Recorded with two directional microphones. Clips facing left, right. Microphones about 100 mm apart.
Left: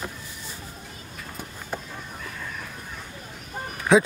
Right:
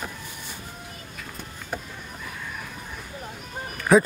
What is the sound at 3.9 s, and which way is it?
Speech, centre (ahead or behind).